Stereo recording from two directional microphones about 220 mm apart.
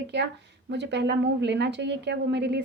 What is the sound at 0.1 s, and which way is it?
A woman's voice, 50° right (ahead or behind).